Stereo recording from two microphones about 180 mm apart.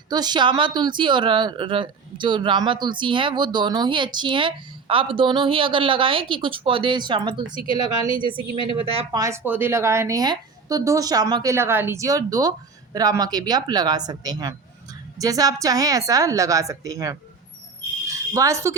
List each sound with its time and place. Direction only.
0.1 s a woman's voice: 25° right (ahead or behind)
9.2 s a woman's voice: 15° right (ahead or behind)